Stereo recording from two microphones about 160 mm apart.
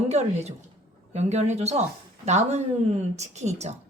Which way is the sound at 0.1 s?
45° right (ahead or behind).